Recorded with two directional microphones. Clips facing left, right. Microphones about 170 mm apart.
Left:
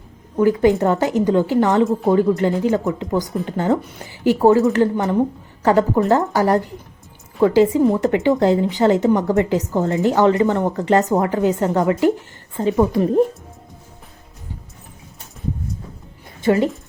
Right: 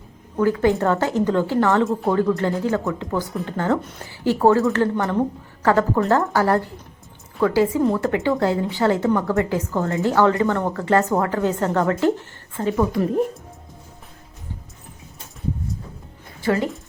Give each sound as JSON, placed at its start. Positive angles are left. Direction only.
{"t": 0.3, "sound": "a woman's voice", "side_deg": 15}
{"t": 16.4, "sound": "speech", "side_deg": 20}